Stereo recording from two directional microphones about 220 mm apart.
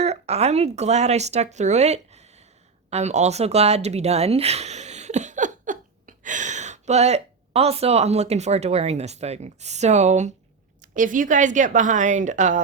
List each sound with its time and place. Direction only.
0.0 s a woman's voice: 30° right (ahead or behind)